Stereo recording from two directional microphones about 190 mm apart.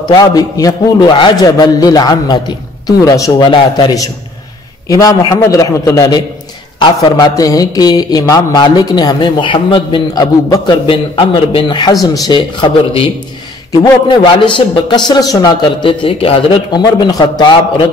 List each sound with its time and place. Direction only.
0.1 s speech: 20° left (ahead or behind)